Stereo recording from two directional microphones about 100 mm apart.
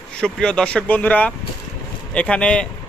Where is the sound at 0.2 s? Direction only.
10° left (ahead or behind).